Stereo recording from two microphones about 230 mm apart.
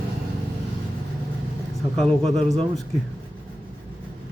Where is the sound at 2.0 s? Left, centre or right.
Centre.